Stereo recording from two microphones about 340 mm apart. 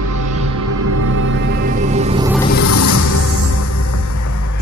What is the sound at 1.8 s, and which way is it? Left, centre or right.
Music, centre.